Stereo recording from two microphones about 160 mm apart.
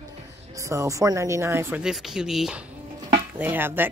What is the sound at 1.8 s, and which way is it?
Speech, 5° right (ahead or behind).